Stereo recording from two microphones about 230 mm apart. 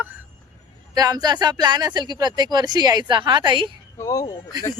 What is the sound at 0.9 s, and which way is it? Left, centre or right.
Speech, centre.